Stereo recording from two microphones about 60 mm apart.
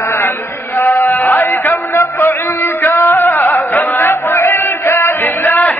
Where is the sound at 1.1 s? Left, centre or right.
Left.